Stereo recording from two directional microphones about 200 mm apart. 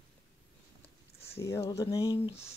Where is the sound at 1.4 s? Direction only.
15° left (ahead or behind).